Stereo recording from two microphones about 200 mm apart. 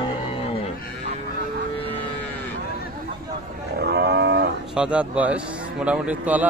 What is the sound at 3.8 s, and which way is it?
Livestock, 55° right (ahead or behind).